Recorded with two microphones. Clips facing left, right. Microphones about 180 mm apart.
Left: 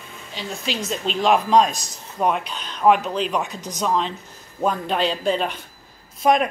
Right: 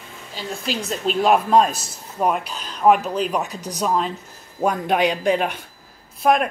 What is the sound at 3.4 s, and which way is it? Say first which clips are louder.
Speech: right 2 dB; 35° right (ahead or behind).